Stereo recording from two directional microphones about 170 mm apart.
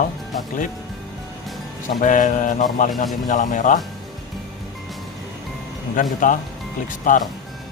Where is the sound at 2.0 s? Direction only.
50° left (ahead or behind).